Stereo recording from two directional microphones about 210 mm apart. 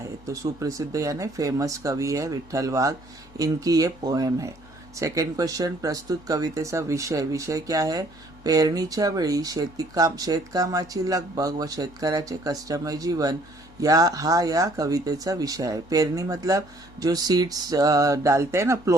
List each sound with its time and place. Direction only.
0.3 s speech: 15° right (ahead or behind)